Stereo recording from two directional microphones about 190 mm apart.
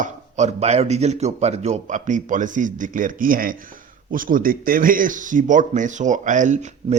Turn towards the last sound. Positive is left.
turn(degrees=-40)  # may be behind; listen again after turning